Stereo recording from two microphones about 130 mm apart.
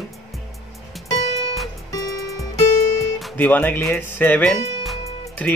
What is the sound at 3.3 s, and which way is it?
Speech, 15° left (ahead or behind).